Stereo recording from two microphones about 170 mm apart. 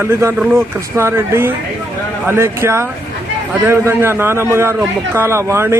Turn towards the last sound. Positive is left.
turn(degrees=-15)  # may be behind; listen again after turning